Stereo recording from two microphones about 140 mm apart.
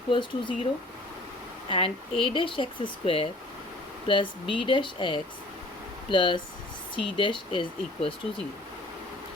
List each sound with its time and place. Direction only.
0.1 s speech: 35° left (ahead or behind)
1.7 s speech: 40° left (ahead or behind)